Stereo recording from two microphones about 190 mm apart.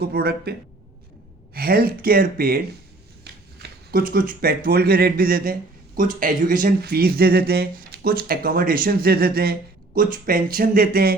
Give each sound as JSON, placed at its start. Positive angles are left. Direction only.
{"t": 0.0, "sound": "speech", "side_deg": -55}
{"t": 1.5, "sound": "speech", "side_deg": -50}
{"t": 3.3, "sound": "a sound", "side_deg": -60}
{"t": 3.6, "sound": "speech", "side_deg": -50}